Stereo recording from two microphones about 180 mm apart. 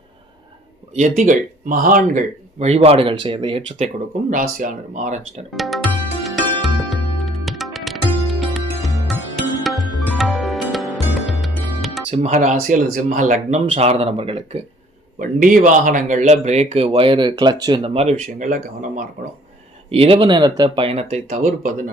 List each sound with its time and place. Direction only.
0.9 s speech: 45° right (ahead or behind)
4.3 s speech: 50° right (ahead or behind)
5.5 s speech: centre (ahead or behind)
6.2 s music: centre (ahead or behind)
12.1 s speech: 40° right (ahead or behind)
15.2 s speech: 50° right (ahead or behind); by 17.9 s 20° right (ahead or behind)
17.9 s speech: 35° right (ahead or behind)
18.4 s speech: 45° right (ahead or behind)
19.9 s speech: 30° right (ahead or behind)